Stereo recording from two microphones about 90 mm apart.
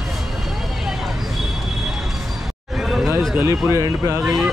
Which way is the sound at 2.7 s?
5° right (ahead or behind).